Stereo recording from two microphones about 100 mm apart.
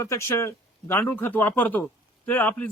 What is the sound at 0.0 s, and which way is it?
A man's voice, 30° left (ahead or behind).